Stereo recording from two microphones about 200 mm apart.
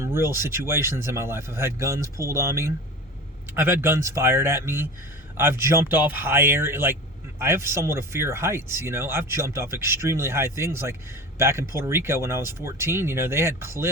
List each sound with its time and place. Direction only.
0.0 s speech: 10° right (ahead or behind)